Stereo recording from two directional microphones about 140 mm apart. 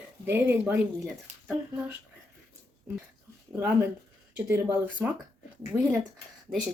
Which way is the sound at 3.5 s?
15° right (ahead or behind).